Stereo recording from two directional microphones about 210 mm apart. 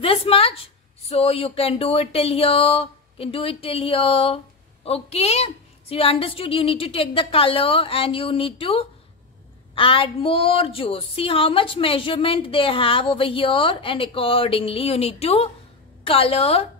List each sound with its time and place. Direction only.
0.0 s a woman's voice: 25° left (ahead or behind)